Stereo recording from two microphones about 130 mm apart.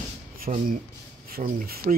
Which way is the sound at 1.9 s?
85° right.